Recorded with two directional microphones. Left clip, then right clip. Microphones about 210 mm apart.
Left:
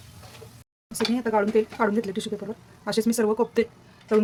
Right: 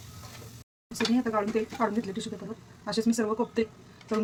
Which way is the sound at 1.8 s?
50° left (ahead or behind).